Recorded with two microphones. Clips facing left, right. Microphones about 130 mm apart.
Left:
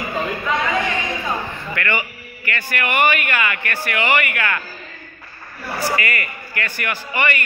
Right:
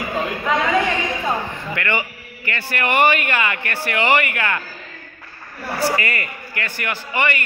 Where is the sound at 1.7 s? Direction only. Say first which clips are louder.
Even; 20° right (ahead or behind).